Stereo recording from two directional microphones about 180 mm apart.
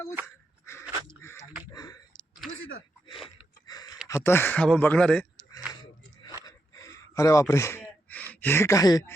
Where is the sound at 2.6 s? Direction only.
90° left.